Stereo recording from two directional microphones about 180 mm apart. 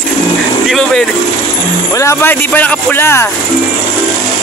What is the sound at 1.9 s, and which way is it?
Speech, 15° left (ahead or behind).